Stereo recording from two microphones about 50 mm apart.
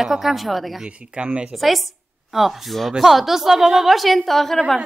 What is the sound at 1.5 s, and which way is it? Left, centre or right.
A woman's voice, centre.